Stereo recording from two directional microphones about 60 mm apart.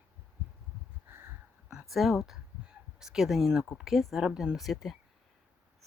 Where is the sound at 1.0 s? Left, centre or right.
Right.